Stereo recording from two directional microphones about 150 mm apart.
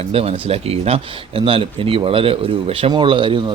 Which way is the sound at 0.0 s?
40° right (ahead or behind).